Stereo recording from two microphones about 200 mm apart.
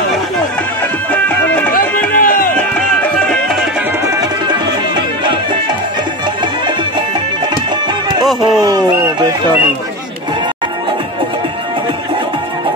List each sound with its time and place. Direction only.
1.1 s music: 5° left (ahead or behind)
2.1 s music: 45° left (ahead or behind)
2.5 s music: 5° left (ahead or behind)
4.0 s music: 20° right (ahead or behind)
8.5 s a sound: 20° right (ahead or behind)